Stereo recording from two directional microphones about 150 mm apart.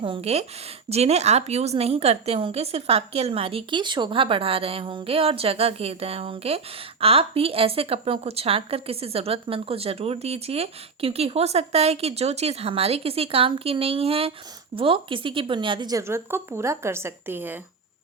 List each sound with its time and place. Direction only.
0.0 s a woman's voice: 40° right (ahead or behind); by 17.6 s 15° right (ahead or behind)